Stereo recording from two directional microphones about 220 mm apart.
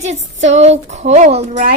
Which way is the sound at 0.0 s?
30° right (ahead or behind).